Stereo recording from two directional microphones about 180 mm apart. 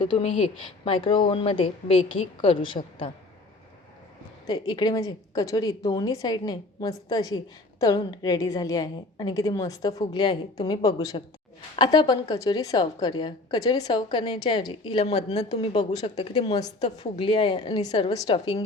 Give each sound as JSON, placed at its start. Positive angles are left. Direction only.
{"t": 0.0, "sound": "a woman's voice", "side_deg": 30}
{"t": 4.4, "sound": "a woman's voice", "side_deg": 20}
{"t": 15.4, "sound": "a woman's voice", "side_deg": 25}
{"t": 16.0, "sound": "a woman's voice", "side_deg": 35}